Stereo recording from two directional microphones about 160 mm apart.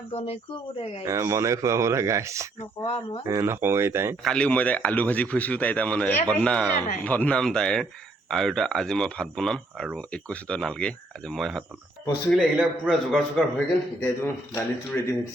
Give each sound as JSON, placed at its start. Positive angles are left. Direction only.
{"t": 0.1, "sound": "speech", "side_deg": 35}
{"t": 1.0, "sound": "speech", "side_deg": -20}
{"t": 2.8, "sound": "speech", "side_deg": 35}
{"t": 3.2, "sound": "speech", "side_deg": -15}
{"t": 4.2, "sound": "speech", "side_deg": 5}
{"t": 13.1, "sound": "speech", "side_deg": 5}